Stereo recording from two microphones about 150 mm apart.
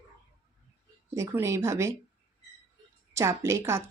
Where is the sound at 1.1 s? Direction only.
20° right (ahead or behind).